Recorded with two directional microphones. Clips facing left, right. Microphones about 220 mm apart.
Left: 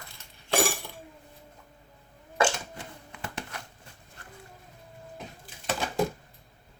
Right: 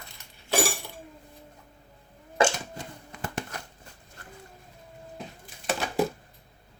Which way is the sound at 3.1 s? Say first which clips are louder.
Right 4 dB; 45° right (ahead or behind).